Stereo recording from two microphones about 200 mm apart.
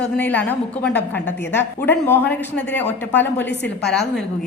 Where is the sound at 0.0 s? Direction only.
10° left (ahead or behind).